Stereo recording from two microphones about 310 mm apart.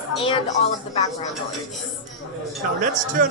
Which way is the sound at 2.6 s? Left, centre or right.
Right.